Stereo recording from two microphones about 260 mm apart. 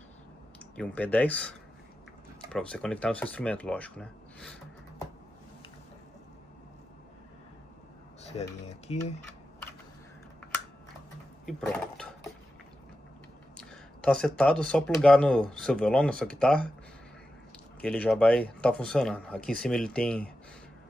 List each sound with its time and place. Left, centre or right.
0.7 s speech: centre
2.5 s speech: centre
8.3 s speech: left
13.6 s speech: centre
17.7 s speech: centre